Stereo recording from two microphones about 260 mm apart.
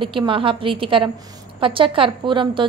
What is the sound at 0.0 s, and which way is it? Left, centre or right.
A woman's voice, centre.